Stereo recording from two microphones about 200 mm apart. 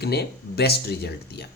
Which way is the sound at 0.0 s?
55° left (ahead or behind).